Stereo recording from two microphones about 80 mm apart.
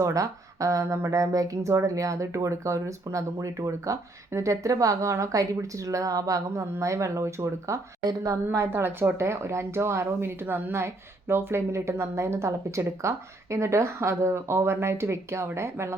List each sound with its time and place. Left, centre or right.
0.0 s speech: right
8.0 s speech: right
8.4 s speech: right